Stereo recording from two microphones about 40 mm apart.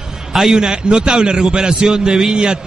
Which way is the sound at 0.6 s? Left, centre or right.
Right.